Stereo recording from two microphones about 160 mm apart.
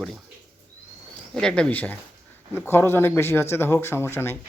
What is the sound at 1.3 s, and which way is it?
A man's voice, 5° left (ahead or behind).